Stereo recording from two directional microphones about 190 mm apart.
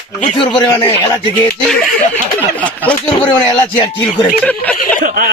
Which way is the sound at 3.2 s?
25° left (ahead or behind).